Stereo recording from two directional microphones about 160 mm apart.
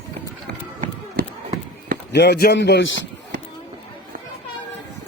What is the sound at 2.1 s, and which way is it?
Speech, 90° left.